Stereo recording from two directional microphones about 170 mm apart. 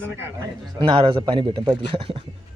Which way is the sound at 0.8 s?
30° right (ahead or behind).